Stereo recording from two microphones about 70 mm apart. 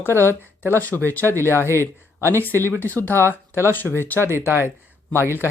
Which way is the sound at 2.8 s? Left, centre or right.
Left.